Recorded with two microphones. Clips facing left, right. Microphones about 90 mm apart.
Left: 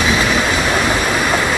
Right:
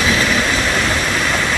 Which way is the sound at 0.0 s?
10° left (ahead or behind).